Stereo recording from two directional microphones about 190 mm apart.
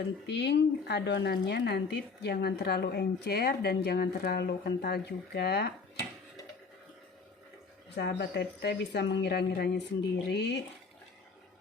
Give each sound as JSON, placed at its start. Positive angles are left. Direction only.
{"t": 0.3, "sound": "speech", "side_deg": 65}
{"t": 7.9, "sound": "speech", "side_deg": 60}